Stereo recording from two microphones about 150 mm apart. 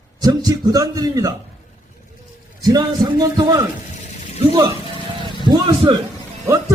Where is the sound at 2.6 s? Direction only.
25° right (ahead or behind).